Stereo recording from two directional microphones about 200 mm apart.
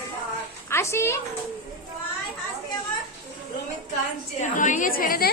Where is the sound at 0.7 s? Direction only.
15° left (ahead or behind).